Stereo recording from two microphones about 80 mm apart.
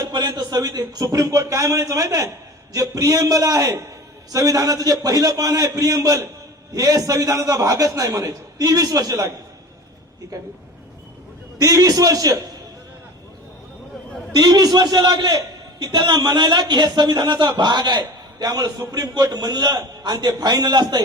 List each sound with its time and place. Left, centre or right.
0.1 s a man's voice: right
10.3 s a man's voice: right
11.5 s a man's voice: right
14.3 s a man's voice: right